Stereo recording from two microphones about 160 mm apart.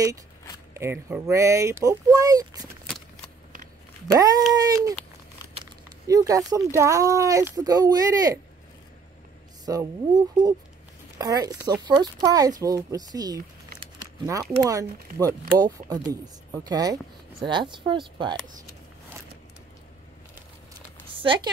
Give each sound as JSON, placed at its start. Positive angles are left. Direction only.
{"t": 0.7, "sound": "speech", "side_deg": -15}
{"t": 4.6, "sound": "speech", "side_deg": -20}
{"t": 6.0, "sound": "speech", "side_deg": -20}
{"t": 9.7, "sound": "speech", "side_deg": -25}
{"t": 21.2, "sound": "speech", "side_deg": -30}